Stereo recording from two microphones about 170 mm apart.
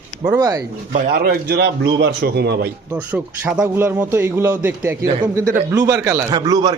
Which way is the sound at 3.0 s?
5° right (ahead or behind).